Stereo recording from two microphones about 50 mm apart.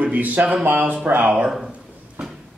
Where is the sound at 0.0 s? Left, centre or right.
Right.